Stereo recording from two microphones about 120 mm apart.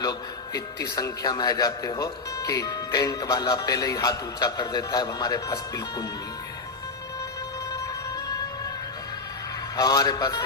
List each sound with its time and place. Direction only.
0.0 s a man's voice: 30° left (ahead or behind)
9.7 s a man's voice: 30° left (ahead or behind)